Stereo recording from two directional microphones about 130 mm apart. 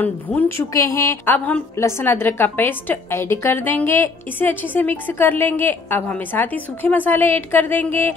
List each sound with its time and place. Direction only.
0.0 s a woman's voice: 15° left (ahead or behind)